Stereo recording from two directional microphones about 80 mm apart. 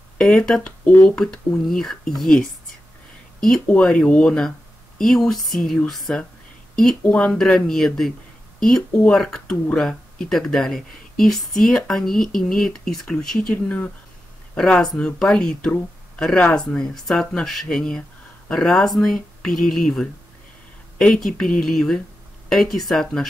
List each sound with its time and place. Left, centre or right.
0.2 s speech: centre
13.5 s speech: centre